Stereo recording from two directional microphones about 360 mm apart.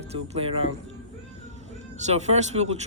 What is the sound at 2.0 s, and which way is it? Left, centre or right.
Speech, centre.